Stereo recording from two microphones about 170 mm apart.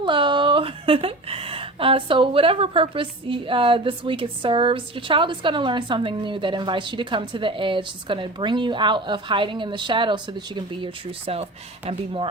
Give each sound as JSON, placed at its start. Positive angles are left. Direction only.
{"t": 0.0, "sound": "speech", "side_deg": -30}